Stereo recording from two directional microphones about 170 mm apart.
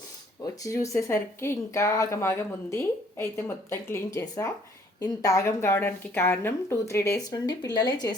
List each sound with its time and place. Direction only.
0.4 s speech: 20° left (ahead or behind)